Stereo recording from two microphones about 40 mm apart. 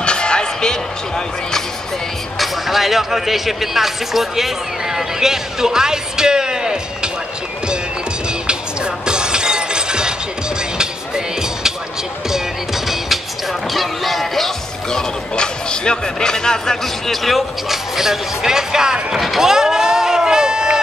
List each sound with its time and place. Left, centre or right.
0.0 s basketball bounce: left
2.3 s speech: centre
9.0 s music: right; by 16.7 s centre
16.8 s speech: centre
19.2 s a sound: centre